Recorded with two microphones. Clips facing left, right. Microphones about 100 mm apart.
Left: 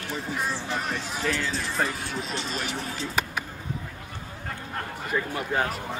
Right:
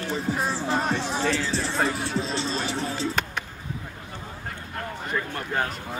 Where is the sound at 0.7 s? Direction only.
30° right (ahead or behind).